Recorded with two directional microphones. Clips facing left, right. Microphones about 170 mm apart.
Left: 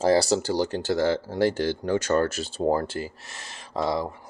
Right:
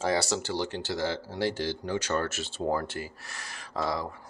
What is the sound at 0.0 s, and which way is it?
Speech, 35° left (ahead or behind).